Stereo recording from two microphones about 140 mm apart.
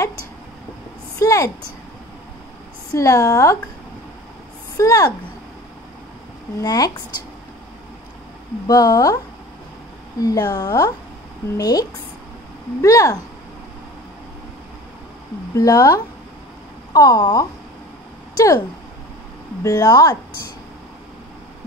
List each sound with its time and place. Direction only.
1.2 s a woman's voice: 25° left (ahead or behind)
2.9 s a woman's voice: 20° left (ahead or behind)
4.7 s a woman's voice: 25° left (ahead or behind)
6.6 s a woman's voice: 25° left (ahead or behind)
8.6 s a woman's voice: 25° left (ahead or behind)
10.2 s a woman's voice: 25° left (ahead or behind)
12.8 s a woman's voice: 25° left (ahead or behind)
15.5 s a woman's voice: 25° left (ahead or behind)
19.6 s a woman's voice: 25° left (ahead or behind)